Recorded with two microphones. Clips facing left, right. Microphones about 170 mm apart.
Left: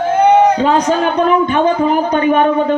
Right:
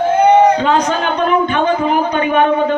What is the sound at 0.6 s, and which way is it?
Speech, 40° left (ahead or behind).